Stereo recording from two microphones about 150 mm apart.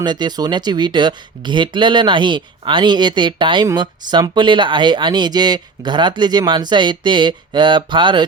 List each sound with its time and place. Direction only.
0.0 s speech: 30° right (ahead or behind)